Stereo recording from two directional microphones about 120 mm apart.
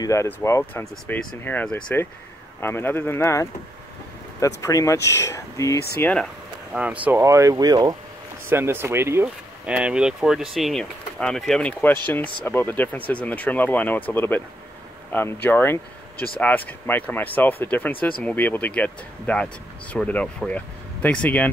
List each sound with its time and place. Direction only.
0.0 s speech: 25° left (ahead or behind)
5.9 s speech: 15° left (ahead or behind)
6.7 s speech: 10° right (ahead or behind); by 7.9 s 35° right (ahead or behind)
8.5 s speech: 20° right (ahead or behind)
9.7 s speech: 10° right (ahead or behind); by 21.5 s 10° left (ahead or behind)